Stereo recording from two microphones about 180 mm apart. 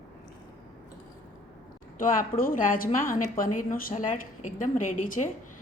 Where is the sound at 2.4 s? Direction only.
50° left (ahead or behind).